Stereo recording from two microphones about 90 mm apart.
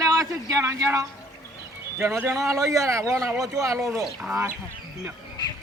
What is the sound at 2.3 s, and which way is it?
A man's voice, 35° right (ahead or behind).